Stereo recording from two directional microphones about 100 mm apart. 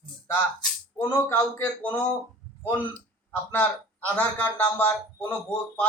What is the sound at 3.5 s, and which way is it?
Speech, 15° left (ahead or behind).